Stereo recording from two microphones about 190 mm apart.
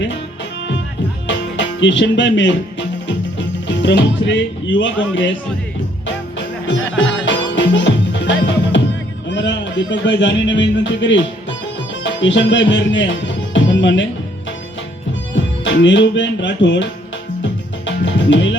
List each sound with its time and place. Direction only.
1.5 s speech: 75° left (ahead or behind)
6.9 s music: 75° left (ahead or behind)
9.3 s speech: 70° left (ahead or behind)
12.0 s music: 75° left (ahead or behind)
15.4 s speech: 75° left (ahead or behind)
17.4 s music: 75° left (ahead or behind)